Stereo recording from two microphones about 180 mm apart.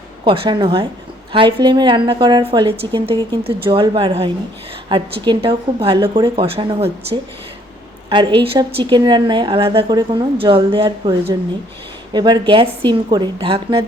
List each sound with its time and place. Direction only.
0.3 s a woman's voice: 30° right (ahead or behind)
12.1 s a woman's voice: 25° right (ahead or behind)